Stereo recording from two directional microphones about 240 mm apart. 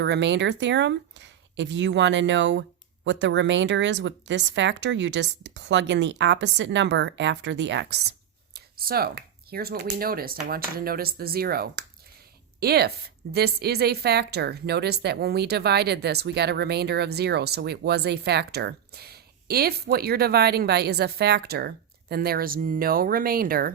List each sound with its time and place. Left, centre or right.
0.0 s speech: right